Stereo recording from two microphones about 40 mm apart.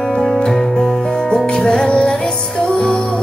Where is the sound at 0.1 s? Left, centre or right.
Centre.